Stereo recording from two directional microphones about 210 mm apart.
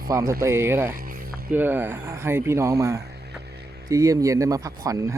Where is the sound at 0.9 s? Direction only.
45° right (ahead or behind).